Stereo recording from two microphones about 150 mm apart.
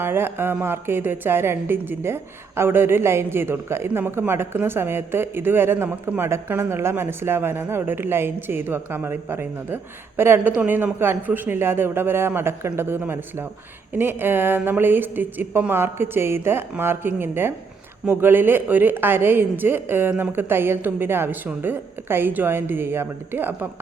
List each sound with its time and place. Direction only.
0.0 s a woman's voice: 15° right (ahead or behind)